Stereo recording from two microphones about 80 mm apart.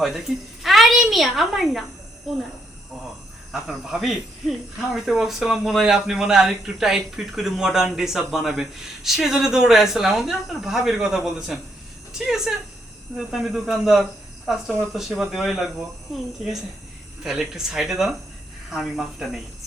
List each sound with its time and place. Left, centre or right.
0.6 s a child's voice: centre
3.5 s speech: centre